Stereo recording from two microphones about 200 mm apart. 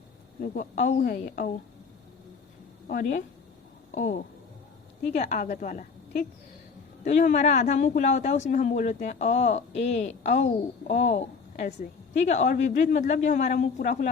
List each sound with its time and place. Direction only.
0.4 s a woman's voice: 40° left (ahead or behind)
2.8 s a woman's voice: 45° left (ahead or behind)